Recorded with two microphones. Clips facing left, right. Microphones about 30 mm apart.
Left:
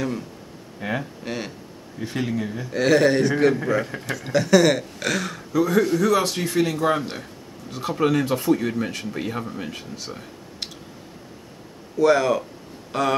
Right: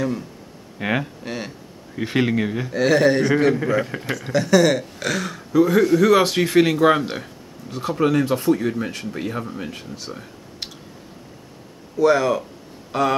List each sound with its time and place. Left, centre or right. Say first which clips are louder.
0.7 s speech: right 5 dB; right
1.2 s speech: even; centre
2.0 s speech: right 6 dB; right
2.7 s speech: right 1 dB; centre
4.2 s speech: even; centre
5.5 s speech: right 4 dB; centre
7.0 s speech: right 4 dB; centre
7.8 s speech: right 2 dB; centre
12.0 s speech: right 1 dB; centre